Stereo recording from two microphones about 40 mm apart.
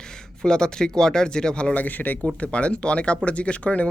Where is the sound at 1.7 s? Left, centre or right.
Left.